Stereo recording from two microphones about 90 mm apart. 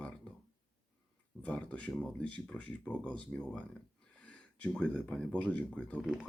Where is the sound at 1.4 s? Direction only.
15° left (ahead or behind).